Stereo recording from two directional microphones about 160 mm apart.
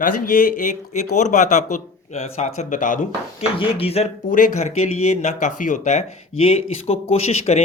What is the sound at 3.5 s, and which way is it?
Speech, 35° left (ahead or behind).